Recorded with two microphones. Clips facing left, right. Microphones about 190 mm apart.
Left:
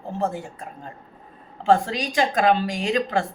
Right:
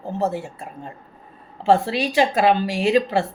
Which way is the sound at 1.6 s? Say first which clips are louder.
Right 2 dB; 5° right (ahead or behind).